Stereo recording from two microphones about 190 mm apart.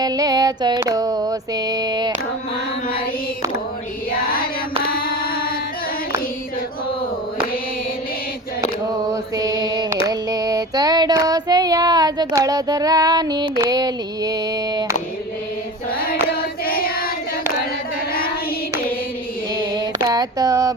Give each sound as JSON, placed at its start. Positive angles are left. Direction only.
{"t": 0.0, "sound": "music", "side_deg": -20}
{"t": 4.1, "sound": "child singing", "side_deg": 50}
{"t": 9.4, "sound": "mantra", "side_deg": -20}
{"t": 10.1, "sound": "child singing", "side_deg": -20}
{"t": 16.2, "sound": "child singing", "side_deg": 55}
{"t": 20.1, "sound": "a sound", "side_deg": -20}